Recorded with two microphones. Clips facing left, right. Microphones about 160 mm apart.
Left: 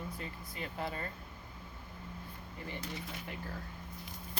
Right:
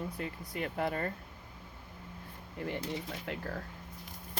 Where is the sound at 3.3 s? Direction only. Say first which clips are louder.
Right 8 dB; 75° right (ahead or behind).